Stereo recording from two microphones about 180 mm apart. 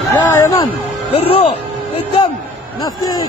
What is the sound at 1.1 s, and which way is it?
Speech, 35° left (ahead or behind).